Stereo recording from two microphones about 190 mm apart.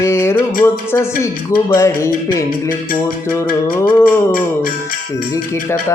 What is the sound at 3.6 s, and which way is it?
Mantra, 10° left (ahead or behind).